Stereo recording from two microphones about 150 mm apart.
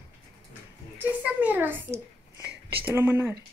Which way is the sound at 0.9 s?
10° right (ahead or behind).